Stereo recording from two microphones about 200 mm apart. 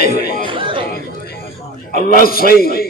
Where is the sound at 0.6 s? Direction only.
25° right (ahead or behind).